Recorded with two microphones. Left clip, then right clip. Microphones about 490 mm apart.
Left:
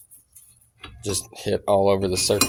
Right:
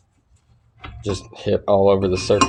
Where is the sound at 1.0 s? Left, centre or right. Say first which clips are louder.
Right 2 dB; left.